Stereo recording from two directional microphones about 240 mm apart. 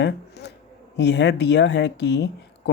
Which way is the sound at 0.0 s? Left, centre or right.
Left.